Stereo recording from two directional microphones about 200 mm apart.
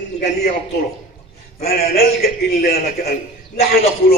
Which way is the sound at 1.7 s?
50° left (ahead or behind).